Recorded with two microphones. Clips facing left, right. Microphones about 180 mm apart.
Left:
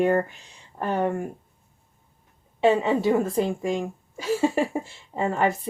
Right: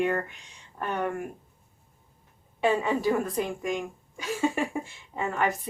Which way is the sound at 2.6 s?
25° left (ahead or behind).